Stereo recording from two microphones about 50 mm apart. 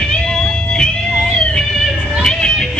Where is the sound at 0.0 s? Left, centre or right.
Centre.